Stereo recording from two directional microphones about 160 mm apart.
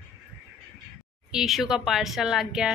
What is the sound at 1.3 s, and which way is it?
Speech, centre (ahead or behind).